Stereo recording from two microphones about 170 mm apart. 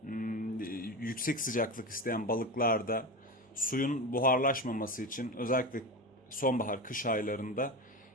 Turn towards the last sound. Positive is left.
turn(degrees=55)  # may be behind; listen again after turning